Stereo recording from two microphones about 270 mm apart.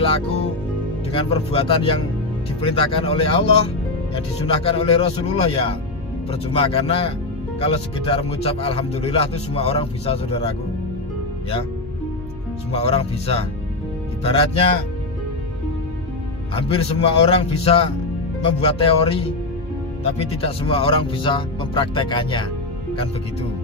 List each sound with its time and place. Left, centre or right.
0.0 s speech: centre
12.7 s speech: left
16.5 s speech: left